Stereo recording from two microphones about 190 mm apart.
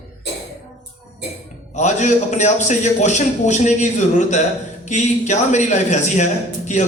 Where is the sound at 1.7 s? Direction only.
40° left (ahead or behind).